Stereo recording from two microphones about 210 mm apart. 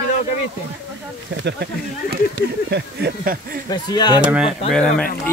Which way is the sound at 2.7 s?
50° right (ahead or behind).